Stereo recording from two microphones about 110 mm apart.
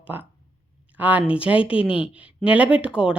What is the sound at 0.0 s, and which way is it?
A woman's voice, 15° right (ahead or behind).